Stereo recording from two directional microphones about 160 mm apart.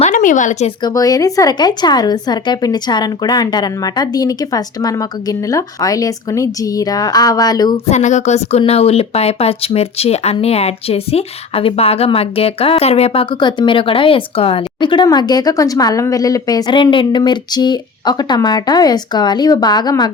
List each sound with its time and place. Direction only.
0.0 s speech: 55° left (ahead or behind)
0.8 s a woman's voice: 25° left (ahead or behind)
7.9 s a woman's voice: 45° left (ahead or behind)
13.3 s a woman's voice: 30° left (ahead or behind)